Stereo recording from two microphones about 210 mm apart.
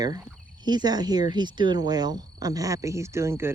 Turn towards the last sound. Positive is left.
turn(degrees=-10)  # may be behind; listen again after turning